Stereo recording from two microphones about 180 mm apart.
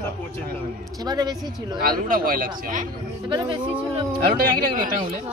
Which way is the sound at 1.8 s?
50° right (ahead or behind).